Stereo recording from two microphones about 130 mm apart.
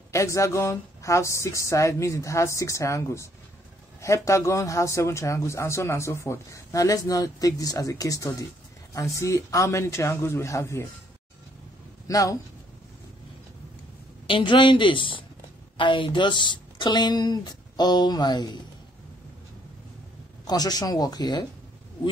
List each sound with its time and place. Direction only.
0.1 s speech: 25° left (ahead or behind)
12.1 s speech: 25° left (ahead or behind)
14.2 s a woman's voice: 40° left (ahead or behind)
20.4 s a woman's voice: 30° left (ahead or behind)